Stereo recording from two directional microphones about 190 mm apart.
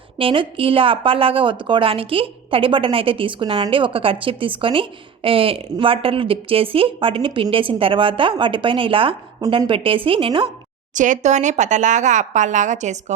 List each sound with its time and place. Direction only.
0.2 s a woman's voice: 30° right (ahead or behind)
10.9 s speech: 40° right (ahead or behind)